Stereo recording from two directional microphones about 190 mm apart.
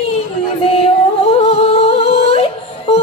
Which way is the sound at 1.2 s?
30° left (ahead or behind).